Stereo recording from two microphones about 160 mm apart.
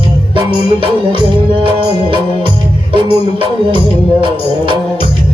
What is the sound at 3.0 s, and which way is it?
Music, 30° right (ahead or behind).